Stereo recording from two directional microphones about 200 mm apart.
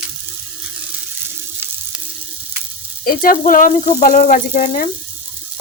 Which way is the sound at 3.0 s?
45° left (ahead or behind).